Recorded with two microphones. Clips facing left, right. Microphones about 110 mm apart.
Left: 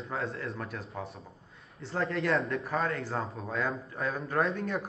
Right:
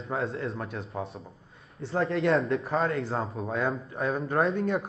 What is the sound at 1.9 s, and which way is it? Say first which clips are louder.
A man's voice: right 4 dB; 30° right (ahead or behind).